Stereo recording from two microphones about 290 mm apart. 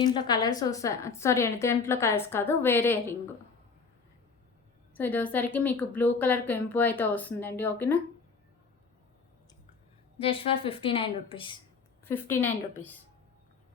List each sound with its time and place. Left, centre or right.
0.0 s a woman's voice: centre
4.9 s a woman's voice: centre
10.2 s a woman's voice: centre
12.0 s a woman's voice: centre